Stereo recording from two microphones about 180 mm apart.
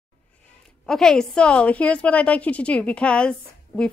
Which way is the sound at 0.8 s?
5° left (ahead or behind).